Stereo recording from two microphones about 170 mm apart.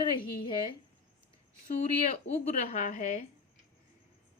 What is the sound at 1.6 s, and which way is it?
Speech, 40° left (ahead or behind).